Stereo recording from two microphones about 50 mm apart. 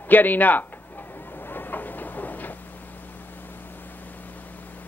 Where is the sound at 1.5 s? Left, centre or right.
Left.